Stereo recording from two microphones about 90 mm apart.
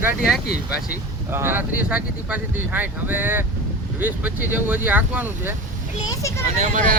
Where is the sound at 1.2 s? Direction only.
25° right (ahead or behind).